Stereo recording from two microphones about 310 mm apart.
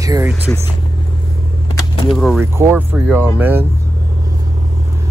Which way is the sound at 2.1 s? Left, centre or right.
Centre.